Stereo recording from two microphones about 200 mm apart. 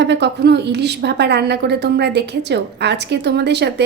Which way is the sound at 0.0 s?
60° right (ahead or behind).